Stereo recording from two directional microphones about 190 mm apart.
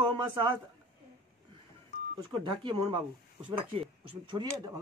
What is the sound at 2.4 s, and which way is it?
Speech, 25° right (ahead or behind).